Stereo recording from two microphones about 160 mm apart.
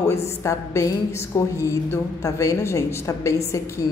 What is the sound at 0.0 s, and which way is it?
A woman's voice, 15° left (ahead or behind).